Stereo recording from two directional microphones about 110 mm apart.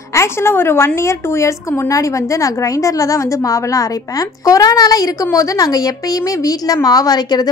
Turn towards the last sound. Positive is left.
turn(degrees=35)  # may be behind; listen again after turning